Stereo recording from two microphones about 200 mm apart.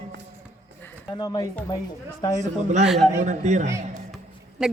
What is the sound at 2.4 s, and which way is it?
Speech, 35° right (ahead or behind).